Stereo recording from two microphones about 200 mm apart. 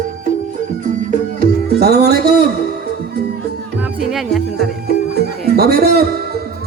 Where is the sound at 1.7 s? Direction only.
55° right (ahead or behind).